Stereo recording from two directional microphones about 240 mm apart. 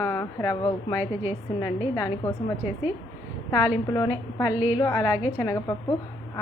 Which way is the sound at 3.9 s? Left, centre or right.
Centre.